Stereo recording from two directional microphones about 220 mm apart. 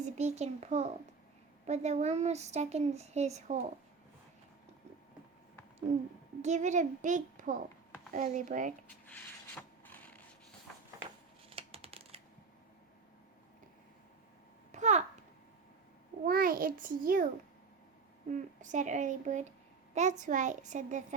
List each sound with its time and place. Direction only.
0.0 s a child's voice: 30° right (ahead or behind)
6.4 s a child's voice: 30° right (ahead or behind)
9.0 s a sound: 10° left (ahead or behind)
11.4 s computer keyboard: 25° right (ahead or behind)
14.7 s babbling: 30° right (ahead or behind)
16.2 s a child's voice: 40° right (ahead or behind)
18.3 s a child's voice: 35° right (ahead or behind)